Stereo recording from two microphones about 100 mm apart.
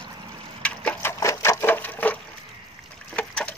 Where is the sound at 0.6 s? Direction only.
15° left (ahead or behind).